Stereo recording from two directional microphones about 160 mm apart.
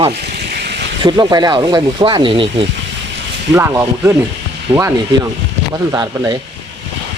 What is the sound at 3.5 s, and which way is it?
Speech, 15° right (ahead or behind).